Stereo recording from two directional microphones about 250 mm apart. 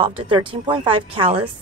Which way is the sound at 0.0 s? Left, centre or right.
Centre.